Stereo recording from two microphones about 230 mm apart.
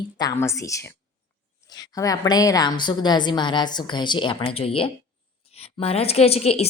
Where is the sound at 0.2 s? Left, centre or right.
Centre.